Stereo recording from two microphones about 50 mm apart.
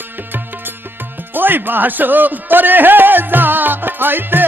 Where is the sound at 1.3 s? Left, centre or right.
Right.